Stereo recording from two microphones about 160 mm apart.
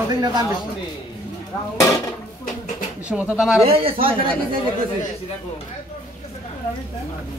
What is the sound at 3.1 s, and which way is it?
Speech, 5° right (ahead or behind).